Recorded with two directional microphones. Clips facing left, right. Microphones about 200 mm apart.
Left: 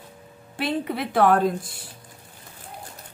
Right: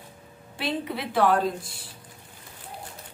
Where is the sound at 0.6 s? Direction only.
50° left (ahead or behind).